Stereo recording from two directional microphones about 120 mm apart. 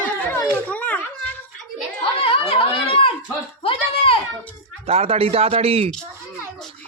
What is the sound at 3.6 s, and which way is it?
Speech, 50° left (ahead or behind).